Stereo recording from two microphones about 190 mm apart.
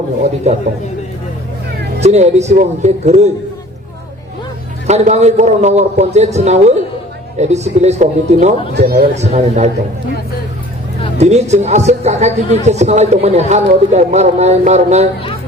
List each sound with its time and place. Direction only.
0.5 s a woman's voice: 35° right (ahead or behind)
2.0 s a woman's voice: 35° right (ahead or behind)
4.9 s a woman's voice: 35° right (ahead or behind)
8.7 s speech: 55° right (ahead or behind)
9.2 s a woman's voice: 35° right (ahead or behind)
11.2 s a woman's voice: 35° right (ahead or behind)